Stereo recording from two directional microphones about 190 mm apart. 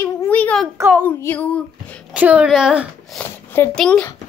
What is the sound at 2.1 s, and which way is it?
Speech, 5° right (ahead or behind).